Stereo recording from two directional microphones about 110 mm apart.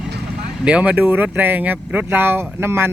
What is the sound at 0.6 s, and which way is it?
Speech, 10° right (ahead or behind).